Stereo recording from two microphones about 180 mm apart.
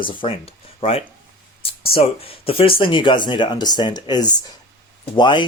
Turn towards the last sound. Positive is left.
turn(degrees=25)  # may be behind; listen again after turning